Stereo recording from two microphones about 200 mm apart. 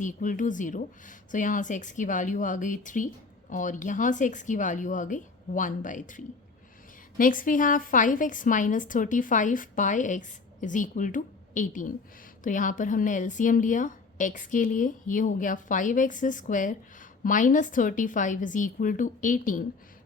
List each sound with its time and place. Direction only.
0.0 s a woman's voice: 40° left (ahead or behind)